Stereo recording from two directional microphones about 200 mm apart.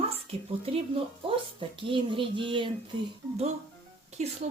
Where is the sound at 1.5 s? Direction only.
25° right (ahead or behind).